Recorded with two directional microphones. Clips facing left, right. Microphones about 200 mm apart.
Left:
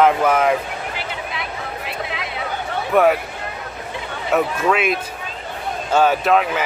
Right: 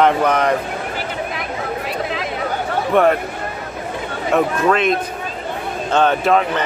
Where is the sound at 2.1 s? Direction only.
40° right (ahead or behind).